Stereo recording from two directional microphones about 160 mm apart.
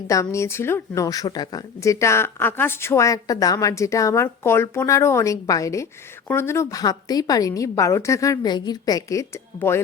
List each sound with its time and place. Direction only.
0.1 s speech: 20° left (ahead or behind)